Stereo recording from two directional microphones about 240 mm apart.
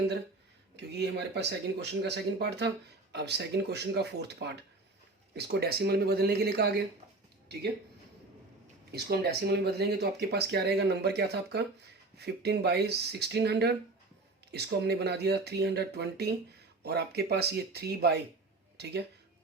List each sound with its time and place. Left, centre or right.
0.8 s speech: right
8.9 s speech: right